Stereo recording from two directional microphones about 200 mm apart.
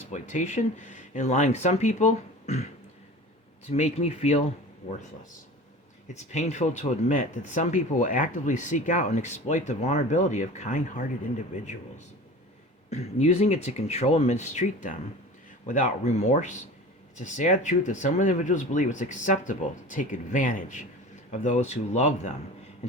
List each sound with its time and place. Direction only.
0.1 s speech: 35° left (ahead or behind)
3.7 s speech: 35° left (ahead or behind)
6.3 s speech: 35° left (ahead or behind)